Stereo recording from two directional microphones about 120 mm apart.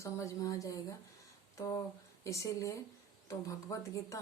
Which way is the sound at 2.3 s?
25° left (ahead or behind).